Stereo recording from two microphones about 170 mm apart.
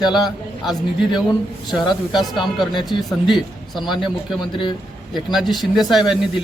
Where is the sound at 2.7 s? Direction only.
30° left (ahead or behind).